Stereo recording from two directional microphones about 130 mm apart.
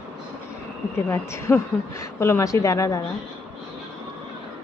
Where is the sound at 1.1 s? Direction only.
20° left (ahead or behind).